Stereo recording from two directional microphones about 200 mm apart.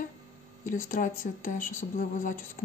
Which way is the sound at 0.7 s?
45° left (ahead or behind).